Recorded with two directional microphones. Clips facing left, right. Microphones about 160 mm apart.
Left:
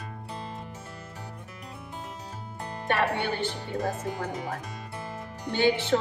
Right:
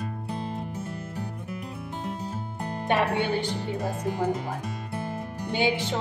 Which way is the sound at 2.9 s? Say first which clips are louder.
Right 2 dB; 15° right (ahead or behind).